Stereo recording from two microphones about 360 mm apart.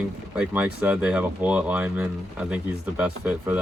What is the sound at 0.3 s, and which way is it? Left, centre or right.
Speech, centre.